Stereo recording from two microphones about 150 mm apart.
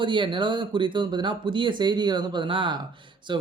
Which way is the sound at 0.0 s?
35° right (ahead or behind).